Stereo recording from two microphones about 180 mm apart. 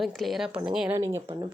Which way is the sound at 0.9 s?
15° right (ahead or behind).